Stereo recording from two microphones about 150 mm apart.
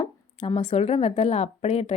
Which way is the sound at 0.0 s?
35° left (ahead or behind).